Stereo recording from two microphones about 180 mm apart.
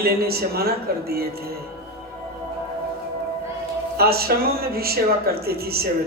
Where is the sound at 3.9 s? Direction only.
60° right (ahead or behind).